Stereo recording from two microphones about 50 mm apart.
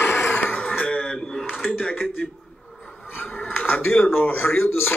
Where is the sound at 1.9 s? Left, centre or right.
Left.